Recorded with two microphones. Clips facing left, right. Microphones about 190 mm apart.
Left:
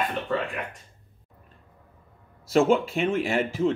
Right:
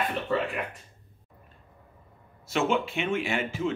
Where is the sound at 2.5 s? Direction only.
35° left (ahead or behind).